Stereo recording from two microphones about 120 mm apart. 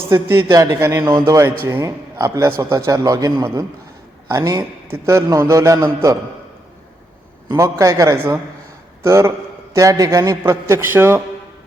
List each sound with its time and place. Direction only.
0.1 s a man's voice: 20° right (ahead or behind)
7.4 s a man's voice: 25° right (ahead or behind)